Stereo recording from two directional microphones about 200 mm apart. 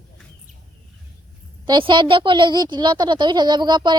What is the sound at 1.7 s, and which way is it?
A woman's voice, 25° right (ahead or behind).